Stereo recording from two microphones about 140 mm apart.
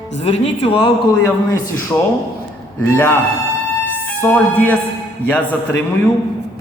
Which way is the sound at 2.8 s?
15° left (ahead or behind).